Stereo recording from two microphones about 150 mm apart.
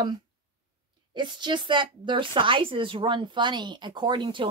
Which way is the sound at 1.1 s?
30° right (ahead or behind).